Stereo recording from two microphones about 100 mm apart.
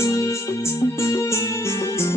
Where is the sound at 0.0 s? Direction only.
30° left (ahead or behind).